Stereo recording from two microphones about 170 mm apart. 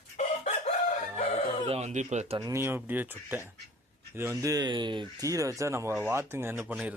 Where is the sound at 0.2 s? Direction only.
40° left (ahead or behind).